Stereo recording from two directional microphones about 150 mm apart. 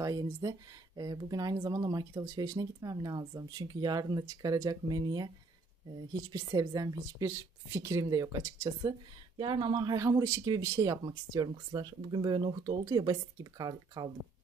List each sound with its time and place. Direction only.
0.0 s speech: 25° right (ahead or behind)
6.3 s speech: 25° right (ahead or behind)